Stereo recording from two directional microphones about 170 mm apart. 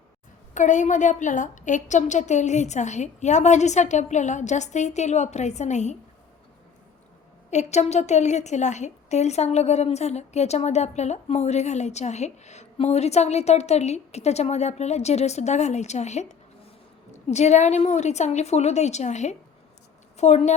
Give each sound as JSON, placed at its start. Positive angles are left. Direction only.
{"t": 0.5, "sound": "a woman's voice", "side_deg": 45}
{"t": 7.5, "sound": "a woman's voice", "side_deg": 40}